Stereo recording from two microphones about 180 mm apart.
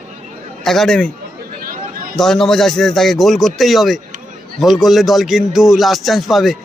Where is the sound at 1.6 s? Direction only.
50° right (ahead or behind).